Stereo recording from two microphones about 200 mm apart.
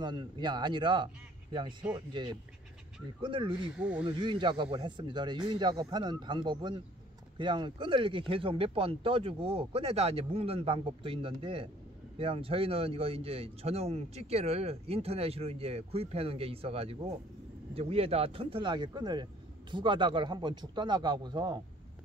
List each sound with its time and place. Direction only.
0.0 s a man's voice: 20° right (ahead or behind)
3.7 s speech: 5° right (ahead or behind)
4.0 s a man's voice: 25° right (ahead or behind)